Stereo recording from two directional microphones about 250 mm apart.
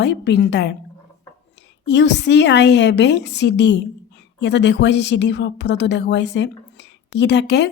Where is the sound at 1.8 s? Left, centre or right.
Left.